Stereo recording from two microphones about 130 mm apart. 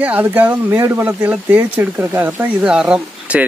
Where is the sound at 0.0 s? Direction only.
10° right (ahead or behind).